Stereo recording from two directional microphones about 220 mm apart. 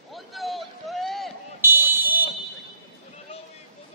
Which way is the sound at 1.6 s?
10° right (ahead or behind).